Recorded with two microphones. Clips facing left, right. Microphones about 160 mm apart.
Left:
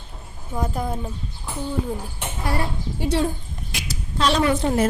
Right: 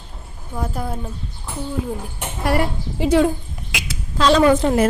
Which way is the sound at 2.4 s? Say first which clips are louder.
Right 6 dB; 90° right.